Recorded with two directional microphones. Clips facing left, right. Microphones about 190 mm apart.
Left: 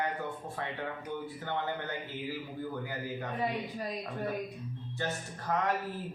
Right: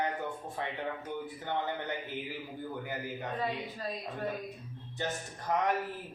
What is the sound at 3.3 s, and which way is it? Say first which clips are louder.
Speech: left 2 dB; 10° left (ahead or behind).